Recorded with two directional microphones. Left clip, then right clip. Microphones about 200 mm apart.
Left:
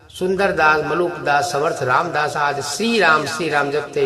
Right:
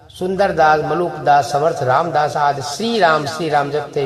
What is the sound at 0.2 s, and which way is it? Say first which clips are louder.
A man's voice: right 2 dB; 20° left (ahead or behind).